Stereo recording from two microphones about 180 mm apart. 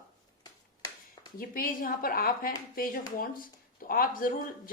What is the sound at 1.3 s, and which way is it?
A woman's voice, 50° left (ahead or behind).